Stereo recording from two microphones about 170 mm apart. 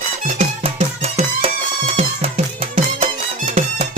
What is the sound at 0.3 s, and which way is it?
Music, 40° right (ahead or behind).